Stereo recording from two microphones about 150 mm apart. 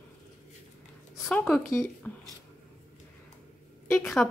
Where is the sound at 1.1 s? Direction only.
5° left (ahead or behind).